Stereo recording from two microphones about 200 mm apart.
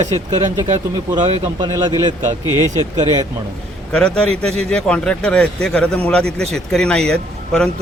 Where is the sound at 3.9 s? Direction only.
5° left (ahead or behind).